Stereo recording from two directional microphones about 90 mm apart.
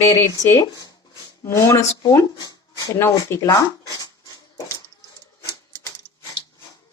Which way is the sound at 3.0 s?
35° left (ahead or behind).